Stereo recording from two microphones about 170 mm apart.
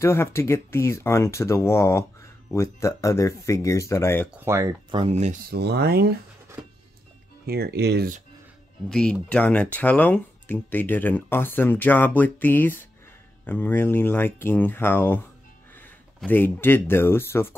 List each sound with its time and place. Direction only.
0.0 s speech: 15° left (ahead or behind)
4.5 s speech: 20° right (ahead or behind)
5.0 s speech: 40° right (ahead or behind)
5.5 s speech: 75° right (ahead or behind)
7.4 s speech: 65° right (ahead or behind)
8.8 s speech: 5° left (ahead or behind)
16.3 s speech: 10° left (ahead or behind)